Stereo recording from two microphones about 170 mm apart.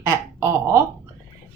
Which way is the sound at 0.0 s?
20° right (ahead or behind).